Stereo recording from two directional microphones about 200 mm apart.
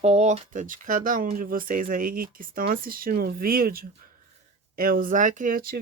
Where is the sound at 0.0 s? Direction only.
30° right (ahead or behind).